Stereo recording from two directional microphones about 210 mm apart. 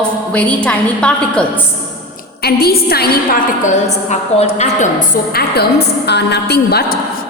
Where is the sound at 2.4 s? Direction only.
45° left (ahead or behind).